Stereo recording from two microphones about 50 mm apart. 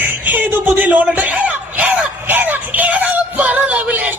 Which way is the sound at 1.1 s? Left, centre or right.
Right.